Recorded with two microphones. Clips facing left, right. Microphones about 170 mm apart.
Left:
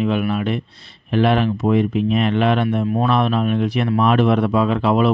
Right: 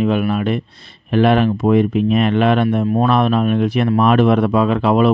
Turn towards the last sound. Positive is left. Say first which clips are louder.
# right 2 dB
turn(degrees=-55)  # may be behind; listen again after turning